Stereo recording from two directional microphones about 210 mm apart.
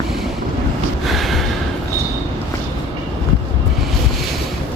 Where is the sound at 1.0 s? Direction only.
Centre (ahead or behind).